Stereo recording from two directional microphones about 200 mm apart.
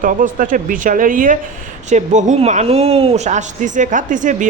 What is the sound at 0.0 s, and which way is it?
Speech, 40° right (ahead or behind).